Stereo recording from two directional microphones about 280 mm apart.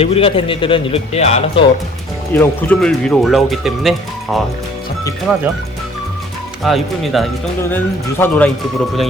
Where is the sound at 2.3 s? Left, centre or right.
Centre.